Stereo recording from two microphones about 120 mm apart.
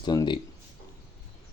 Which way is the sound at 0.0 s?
35° left (ahead or behind).